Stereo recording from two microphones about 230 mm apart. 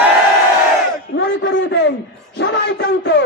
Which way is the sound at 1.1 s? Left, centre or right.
Left.